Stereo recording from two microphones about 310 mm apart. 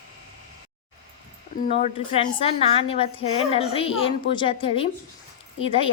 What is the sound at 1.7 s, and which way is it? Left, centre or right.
A woman's voice, centre.